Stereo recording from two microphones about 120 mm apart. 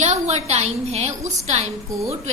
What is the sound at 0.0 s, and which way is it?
A woman's voice, 70° right (ahead or behind).